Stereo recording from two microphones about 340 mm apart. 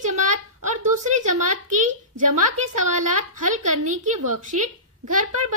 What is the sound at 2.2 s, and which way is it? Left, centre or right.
A woman's voice, right.